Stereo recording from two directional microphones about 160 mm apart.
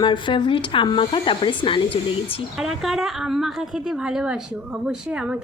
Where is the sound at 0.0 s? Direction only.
30° left (ahead or behind).